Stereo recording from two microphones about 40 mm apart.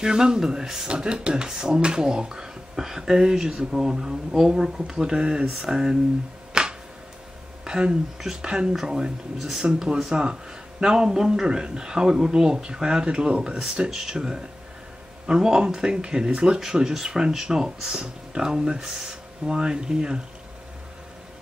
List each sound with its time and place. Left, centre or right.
0.0 s speech: centre
6.5 s a sound: centre
7.6 s speech: centre